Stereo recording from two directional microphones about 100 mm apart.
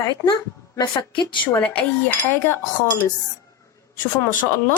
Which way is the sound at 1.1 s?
55° left (ahead or behind).